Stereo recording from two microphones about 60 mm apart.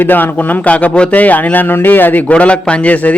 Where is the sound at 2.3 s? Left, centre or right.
Centre.